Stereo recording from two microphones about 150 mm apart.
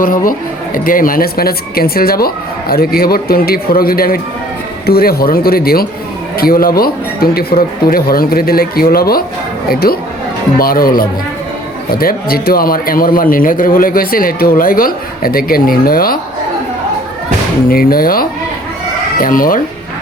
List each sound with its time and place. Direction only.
0.0 s speech: 70° left (ahead or behind); by 10.0 s 90° left
10.6 s speech: 75° left (ahead or behind)
17.7 s speech: 75° left (ahead or behind)